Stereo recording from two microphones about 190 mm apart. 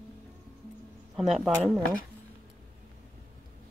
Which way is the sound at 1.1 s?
Centre (ahead or behind).